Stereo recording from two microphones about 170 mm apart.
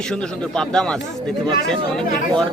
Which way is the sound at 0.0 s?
5° left (ahead or behind).